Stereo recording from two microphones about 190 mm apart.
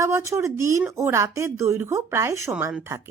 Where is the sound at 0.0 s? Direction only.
15° right (ahead or behind).